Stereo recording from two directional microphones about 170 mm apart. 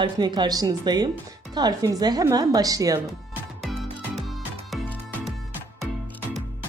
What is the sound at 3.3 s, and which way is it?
Music, centre (ahead or behind).